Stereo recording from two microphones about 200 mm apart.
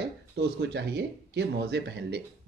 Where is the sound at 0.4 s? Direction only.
55° right (ahead or behind).